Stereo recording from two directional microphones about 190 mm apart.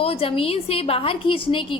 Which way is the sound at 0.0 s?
30° left (ahead or behind).